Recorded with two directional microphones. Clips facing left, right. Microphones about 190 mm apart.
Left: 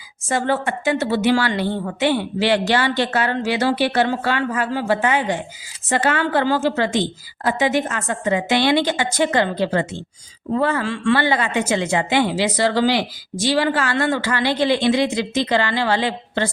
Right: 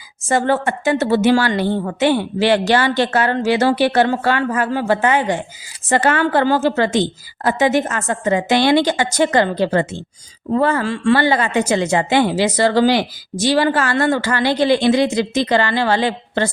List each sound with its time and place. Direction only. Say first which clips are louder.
0.3 s a woman's voice: right 4 dB; 45° right (ahead or behind)